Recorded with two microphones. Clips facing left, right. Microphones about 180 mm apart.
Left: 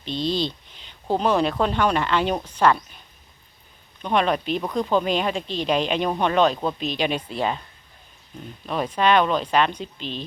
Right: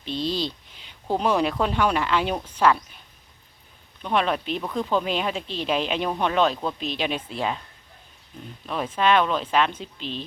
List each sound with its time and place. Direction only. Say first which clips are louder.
0.0 s a sound: left 2 dB; 5° right (ahead or behind)
1.1 s speech: left 2 dB; 10° right (ahead or behind)
4.0 s speech: left 2 dB; centre (ahead or behind)
8.6 s speech: left 2 dB; centre (ahead or behind)